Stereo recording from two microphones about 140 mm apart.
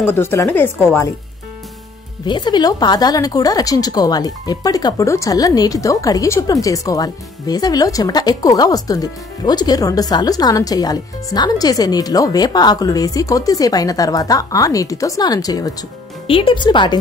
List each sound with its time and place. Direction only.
0.0 s speech: 15° left (ahead or behind)
2.2 s speech: 35° left (ahead or behind)
16.3 s speech: 40° left (ahead or behind)